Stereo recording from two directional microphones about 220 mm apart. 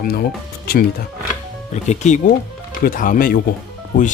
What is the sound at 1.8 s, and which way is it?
Speech, 30° left (ahead or behind).